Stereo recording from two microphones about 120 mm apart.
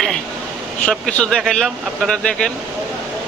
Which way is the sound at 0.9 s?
10° left (ahead or behind).